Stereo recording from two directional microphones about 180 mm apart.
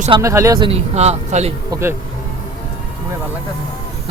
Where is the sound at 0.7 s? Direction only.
35° right (ahead or behind).